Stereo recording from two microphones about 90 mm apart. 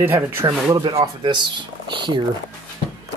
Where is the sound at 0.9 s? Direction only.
60° right (ahead or behind).